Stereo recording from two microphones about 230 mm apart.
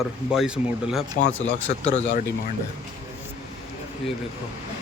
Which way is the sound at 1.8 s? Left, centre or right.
Left.